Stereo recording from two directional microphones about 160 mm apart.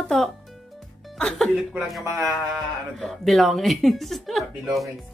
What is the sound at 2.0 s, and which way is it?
Speech, 20° right (ahead or behind).